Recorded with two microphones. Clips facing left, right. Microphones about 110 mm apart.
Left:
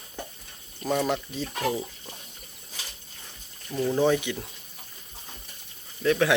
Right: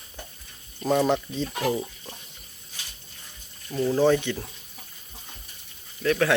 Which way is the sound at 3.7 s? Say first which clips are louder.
Right 2 dB; 15° left (ahead or behind).